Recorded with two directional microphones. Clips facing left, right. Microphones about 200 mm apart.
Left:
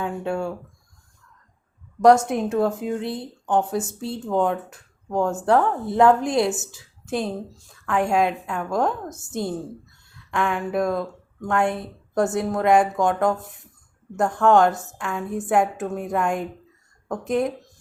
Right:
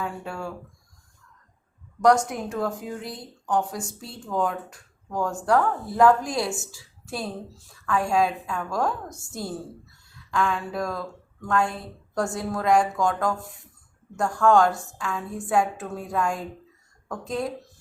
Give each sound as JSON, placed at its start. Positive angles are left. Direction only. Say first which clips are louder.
{"t": 0.0, "sound": "speech", "louder": "left 6 dB", "side_deg": 25}
{"t": 2.2, "sound": "speech", "louder": "left 7 dB", "side_deg": 25}